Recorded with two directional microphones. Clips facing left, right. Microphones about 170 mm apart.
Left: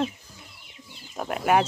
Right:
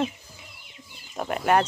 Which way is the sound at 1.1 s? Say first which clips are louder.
Even; centre (ahead or behind).